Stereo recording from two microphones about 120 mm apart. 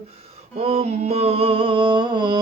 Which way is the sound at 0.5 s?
55° right (ahead or behind).